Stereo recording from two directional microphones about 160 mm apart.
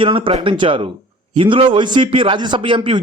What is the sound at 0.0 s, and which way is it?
A man's voice, 35° right (ahead or behind).